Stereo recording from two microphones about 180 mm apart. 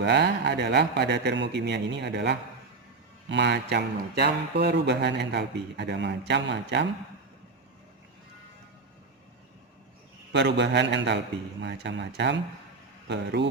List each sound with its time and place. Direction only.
0.0 s speech: 70° right (ahead or behind)
10.3 s speech: 70° right (ahead or behind)